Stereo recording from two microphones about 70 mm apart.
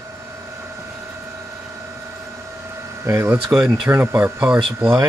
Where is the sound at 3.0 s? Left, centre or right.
Right.